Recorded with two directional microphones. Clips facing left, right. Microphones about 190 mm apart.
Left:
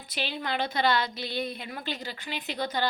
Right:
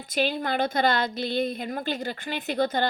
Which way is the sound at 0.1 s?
45° right (ahead or behind).